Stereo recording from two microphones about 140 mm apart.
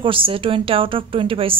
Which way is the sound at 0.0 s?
40° right (ahead or behind).